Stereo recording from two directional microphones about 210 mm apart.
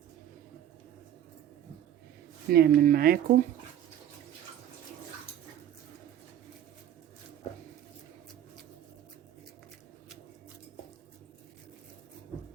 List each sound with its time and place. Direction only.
2.5 s speech: 45° right (ahead or behind)